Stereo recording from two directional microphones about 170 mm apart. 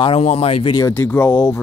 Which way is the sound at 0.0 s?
35° left (ahead or behind).